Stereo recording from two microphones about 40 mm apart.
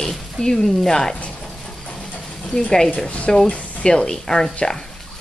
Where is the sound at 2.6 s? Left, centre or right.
Centre.